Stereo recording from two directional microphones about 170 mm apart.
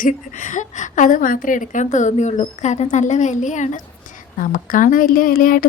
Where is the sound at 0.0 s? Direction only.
50° left (ahead or behind).